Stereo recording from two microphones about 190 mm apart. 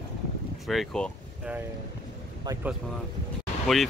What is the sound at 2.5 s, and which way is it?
Speech, 20° right (ahead or behind).